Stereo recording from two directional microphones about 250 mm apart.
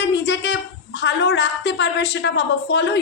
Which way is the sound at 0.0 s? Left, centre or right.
Left.